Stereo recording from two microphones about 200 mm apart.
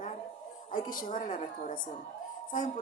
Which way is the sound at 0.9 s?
40° left (ahead or behind).